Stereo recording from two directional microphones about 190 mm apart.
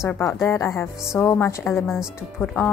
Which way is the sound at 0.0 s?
15° left (ahead or behind).